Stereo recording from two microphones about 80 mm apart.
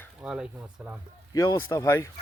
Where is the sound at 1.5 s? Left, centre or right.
Left.